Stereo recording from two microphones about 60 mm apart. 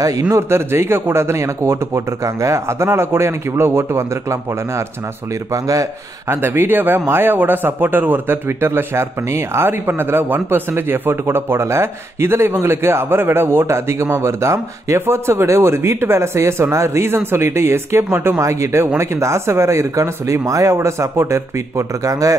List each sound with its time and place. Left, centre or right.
0.3 s speech: right
5.5 s speech: right
6.3 s speech: right
8.5 s speech: right
18.4 s speech: right